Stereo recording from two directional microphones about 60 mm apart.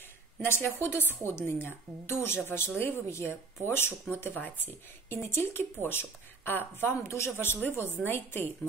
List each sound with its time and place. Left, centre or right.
0.4 s a woman's voice: left
5.1 s a woman's voice: left